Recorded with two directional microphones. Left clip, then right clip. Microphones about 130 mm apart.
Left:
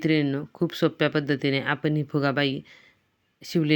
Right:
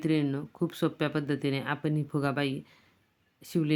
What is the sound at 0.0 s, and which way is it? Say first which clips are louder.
Speech: left 5 dB; 30° left (ahead or behind).